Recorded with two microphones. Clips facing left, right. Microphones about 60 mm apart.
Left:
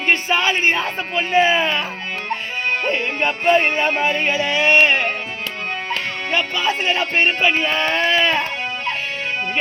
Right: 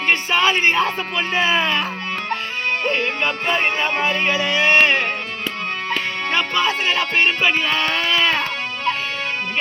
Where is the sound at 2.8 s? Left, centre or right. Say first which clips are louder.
Right 2 dB; left.